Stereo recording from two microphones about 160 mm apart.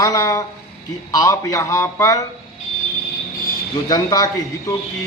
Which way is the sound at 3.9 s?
25° left (ahead or behind).